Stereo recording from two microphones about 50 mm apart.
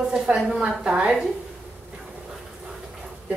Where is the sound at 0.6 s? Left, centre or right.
Right.